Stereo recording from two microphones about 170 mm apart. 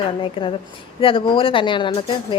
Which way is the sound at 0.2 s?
30° left (ahead or behind).